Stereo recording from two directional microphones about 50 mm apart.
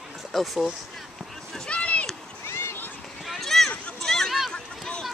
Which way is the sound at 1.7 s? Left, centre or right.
Left.